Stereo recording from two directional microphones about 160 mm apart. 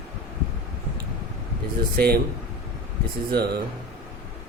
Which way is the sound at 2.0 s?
75° right (ahead or behind).